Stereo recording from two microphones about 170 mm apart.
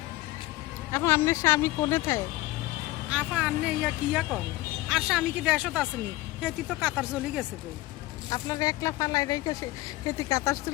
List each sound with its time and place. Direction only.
0.9 s speech: 15° left (ahead or behind)
3.1 s speech: 5° right (ahead or behind)
8.3 s speech: 20° left (ahead or behind)